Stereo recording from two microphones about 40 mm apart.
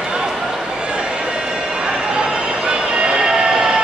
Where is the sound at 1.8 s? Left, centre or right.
Centre.